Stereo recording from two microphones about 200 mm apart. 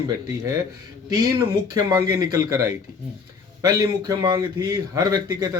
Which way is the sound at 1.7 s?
20° right (ahead or behind).